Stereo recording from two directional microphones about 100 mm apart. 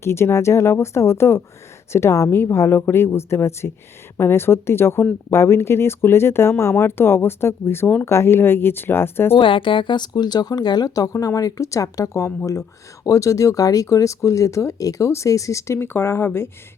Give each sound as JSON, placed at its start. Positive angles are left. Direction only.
{"t": 0.0, "sound": "speech", "side_deg": 25}
{"t": 9.3, "sound": "speech", "side_deg": 55}